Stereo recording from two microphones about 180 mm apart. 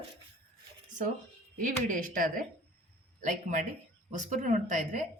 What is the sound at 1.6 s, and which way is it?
Speech, 50° right (ahead or behind).